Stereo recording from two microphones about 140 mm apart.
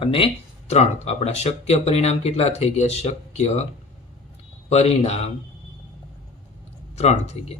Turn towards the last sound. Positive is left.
turn(degrees=50)  # may be behind; listen again after turning